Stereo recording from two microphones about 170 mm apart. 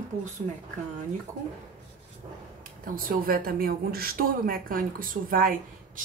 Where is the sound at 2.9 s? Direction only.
55° right (ahead or behind).